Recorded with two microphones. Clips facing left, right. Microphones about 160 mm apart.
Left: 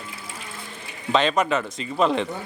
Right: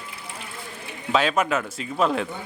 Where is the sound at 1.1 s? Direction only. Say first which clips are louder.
Left 1 dB; 5° right (ahead or behind).